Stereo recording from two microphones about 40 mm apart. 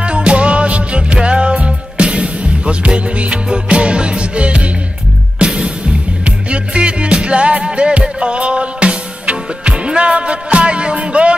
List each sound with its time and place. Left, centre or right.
0.0 s music: right